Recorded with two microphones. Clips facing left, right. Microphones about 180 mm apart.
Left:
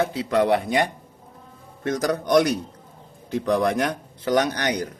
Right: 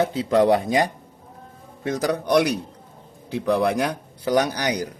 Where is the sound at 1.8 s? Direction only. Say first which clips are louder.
Even; 5° right (ahead or behind).